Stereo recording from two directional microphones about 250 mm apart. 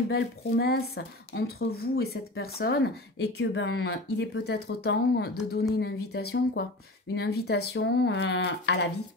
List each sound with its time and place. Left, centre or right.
0.1 s a woman's voice: left